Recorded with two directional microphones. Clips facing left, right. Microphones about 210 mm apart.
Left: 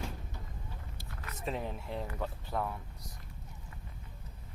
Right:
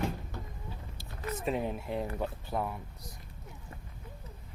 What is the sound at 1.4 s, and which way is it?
Speech, 15° right (ahead or behind).